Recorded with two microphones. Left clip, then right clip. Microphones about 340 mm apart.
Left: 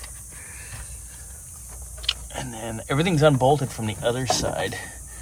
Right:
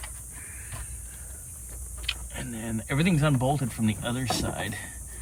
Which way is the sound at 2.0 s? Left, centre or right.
Centre.